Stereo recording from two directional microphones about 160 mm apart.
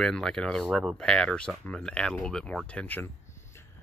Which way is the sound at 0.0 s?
5° left (ahead or behind).